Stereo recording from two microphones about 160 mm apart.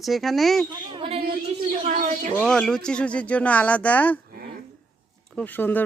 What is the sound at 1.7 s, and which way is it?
Speech, 55° right (ahead or behind).